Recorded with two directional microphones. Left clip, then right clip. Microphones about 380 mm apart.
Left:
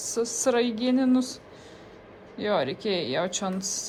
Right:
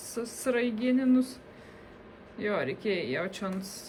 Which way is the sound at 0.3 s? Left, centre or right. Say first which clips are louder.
Left 3 dB; centre.